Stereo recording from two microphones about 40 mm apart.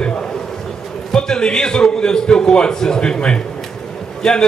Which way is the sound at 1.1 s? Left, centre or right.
Centre.